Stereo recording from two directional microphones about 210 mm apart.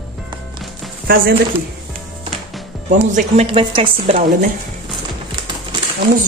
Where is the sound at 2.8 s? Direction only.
35° right (ahead or behind).